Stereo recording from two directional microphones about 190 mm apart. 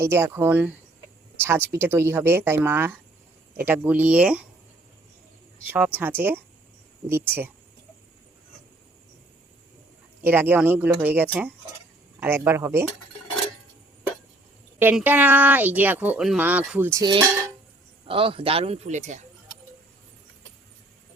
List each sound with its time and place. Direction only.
0.0 s speech: 15° right (ahead or behind)
5.6 s speech: 10° right (ahead or behind)
10.2 s speech: 10° right (ahead or behind)
14.8 s speech: 10° right (ahead or behind); by 19.2 s 40° right (ahead or behind)